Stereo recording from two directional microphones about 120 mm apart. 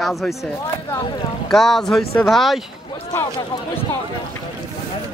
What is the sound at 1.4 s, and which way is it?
A man's voice, 5° left (ahead or behind).